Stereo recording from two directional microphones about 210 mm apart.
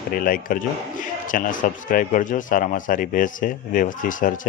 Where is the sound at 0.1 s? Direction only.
45° left (ahead or behind).